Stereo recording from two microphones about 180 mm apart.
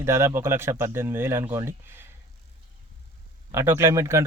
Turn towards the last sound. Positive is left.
turn(degrees=-15)  # may be behind; listen again after turning